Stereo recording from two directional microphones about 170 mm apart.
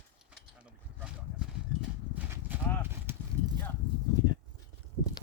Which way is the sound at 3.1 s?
15° right (ahead or behind).